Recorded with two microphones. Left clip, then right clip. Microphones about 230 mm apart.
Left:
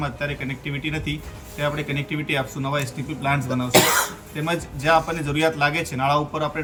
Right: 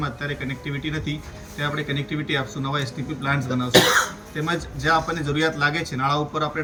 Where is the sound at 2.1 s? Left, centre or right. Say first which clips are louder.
Left 1 dB; centre.